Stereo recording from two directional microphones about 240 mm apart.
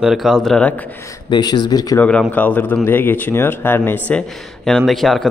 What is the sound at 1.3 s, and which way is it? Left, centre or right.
Speech, centre.